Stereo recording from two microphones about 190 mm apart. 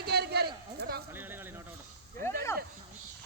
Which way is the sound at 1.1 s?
10° right (ahead or behind).